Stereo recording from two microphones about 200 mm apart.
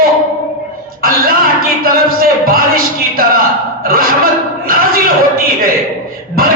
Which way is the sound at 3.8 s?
45° right (ahead or behind).